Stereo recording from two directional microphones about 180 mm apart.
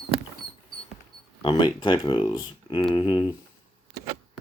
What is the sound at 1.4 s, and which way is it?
Speech, 30° left (ahead or behind).